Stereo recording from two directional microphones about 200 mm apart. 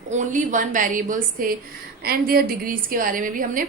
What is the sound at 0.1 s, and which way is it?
A woman's voice, 40° right (ahead or behind).